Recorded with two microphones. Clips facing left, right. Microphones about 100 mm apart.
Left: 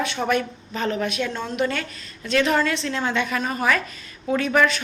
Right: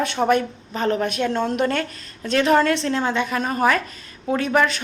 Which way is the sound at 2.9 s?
35° right (ahead or behind).